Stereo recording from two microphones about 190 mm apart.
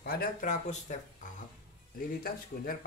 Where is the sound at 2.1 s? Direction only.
50° left (ahead or behind).